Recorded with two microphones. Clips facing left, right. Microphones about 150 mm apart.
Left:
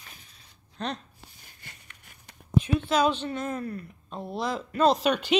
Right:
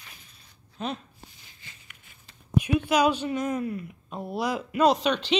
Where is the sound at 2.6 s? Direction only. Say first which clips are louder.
Right 3 dB; 10° right (ahead or behind).